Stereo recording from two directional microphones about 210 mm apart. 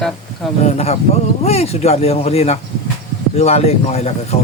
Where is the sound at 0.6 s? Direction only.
30° left (ahead or behind).